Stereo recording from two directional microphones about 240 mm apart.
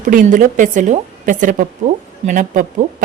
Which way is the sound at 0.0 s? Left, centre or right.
Right.